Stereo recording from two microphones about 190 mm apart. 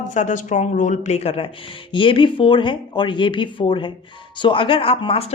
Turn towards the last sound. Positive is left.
turn(degrees=30)  # may be behind; listen again after turning